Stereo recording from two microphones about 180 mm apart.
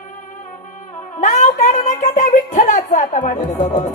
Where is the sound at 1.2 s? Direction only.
40° left (ahead or behind).